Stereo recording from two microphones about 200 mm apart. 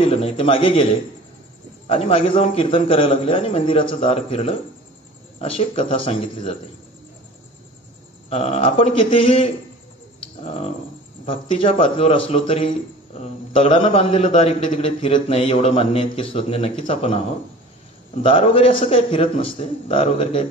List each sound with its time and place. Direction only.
0.0 s a man's voice: 30° left (ahead or behind)
1.9 s a man's voice: 25° left (ahead or behind)
8.3 s a man's voice: 30° left (ahead or behind)
11.2 s a man's voice: 25° left (ahead or behind)
18.2 s a man's voice: 25° left (ahead or behind)